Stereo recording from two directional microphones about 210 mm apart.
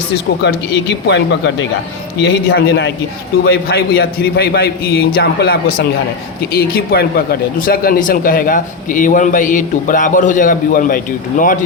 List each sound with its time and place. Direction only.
0.4 s a man's voice: 55° left (ahead or behind); by 11.6 s 40° left (ahead or behind)